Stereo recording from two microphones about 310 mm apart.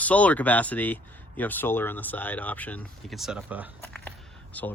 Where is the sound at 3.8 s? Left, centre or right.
Centre.